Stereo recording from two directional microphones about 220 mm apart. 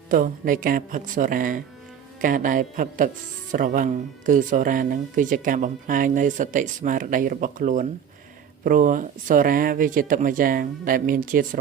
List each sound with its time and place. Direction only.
0.1 s speech: 40° right (ahead or behind)